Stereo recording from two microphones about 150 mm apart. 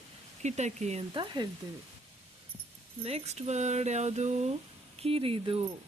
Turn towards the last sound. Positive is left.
turn(degrees=-40)  # may be behind; listen again after turning